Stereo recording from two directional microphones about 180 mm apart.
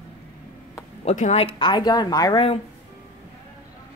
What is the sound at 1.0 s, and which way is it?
Speech, 40° left (ahead or behind).